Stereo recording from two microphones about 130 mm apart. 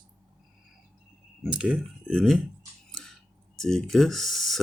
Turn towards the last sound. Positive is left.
turn(degrees=0)  # may be behind; listen again after turning